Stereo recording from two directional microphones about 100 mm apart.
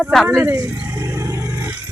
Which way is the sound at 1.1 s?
30° right (ahead or behind).